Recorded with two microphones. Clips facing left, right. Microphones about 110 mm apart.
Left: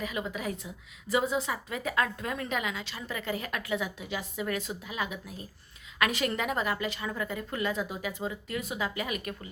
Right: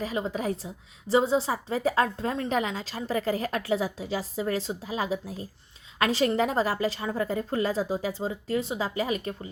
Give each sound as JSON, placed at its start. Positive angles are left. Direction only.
{"t": 0.0, "sound": "a woman's voice", "side_deg": -30}